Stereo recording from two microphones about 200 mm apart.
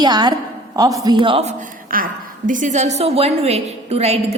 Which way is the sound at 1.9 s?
45° right (ahead or behind).